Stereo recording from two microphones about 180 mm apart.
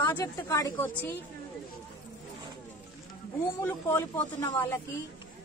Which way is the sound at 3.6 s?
15° left (ahead or behind).